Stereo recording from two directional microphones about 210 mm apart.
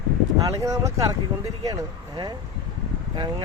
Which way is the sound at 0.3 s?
15° right (ahead or behind).